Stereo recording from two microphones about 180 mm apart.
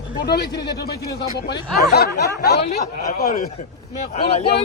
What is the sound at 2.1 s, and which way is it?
Speech, 65° left (ahead or behind).